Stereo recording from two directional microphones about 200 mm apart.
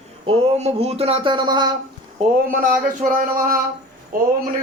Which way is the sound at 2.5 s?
45° right (ahead or behind).